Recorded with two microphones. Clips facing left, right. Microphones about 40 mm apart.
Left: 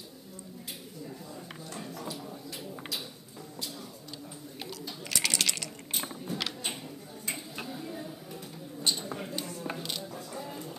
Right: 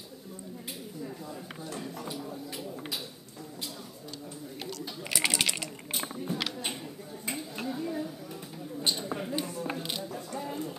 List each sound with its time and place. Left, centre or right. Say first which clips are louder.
5.1 s sewing machine: right 2 dB; centre
6.3 s a sound: even; centre
9.8 s music: right 2 dB; centre